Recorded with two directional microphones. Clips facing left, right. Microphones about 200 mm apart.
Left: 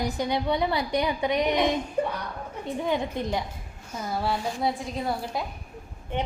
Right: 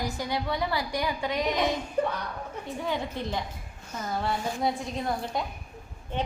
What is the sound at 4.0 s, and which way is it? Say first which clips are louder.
A woman's voice: left 2 dB; 5° left (ahead or behind).